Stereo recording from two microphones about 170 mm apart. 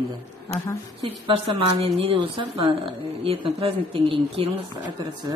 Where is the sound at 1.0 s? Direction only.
30° right (ahead or behind).